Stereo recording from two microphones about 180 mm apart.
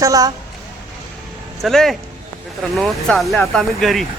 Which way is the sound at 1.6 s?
Centre (ahead or behind).